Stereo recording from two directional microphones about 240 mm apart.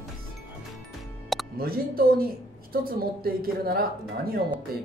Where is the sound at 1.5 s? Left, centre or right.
Right.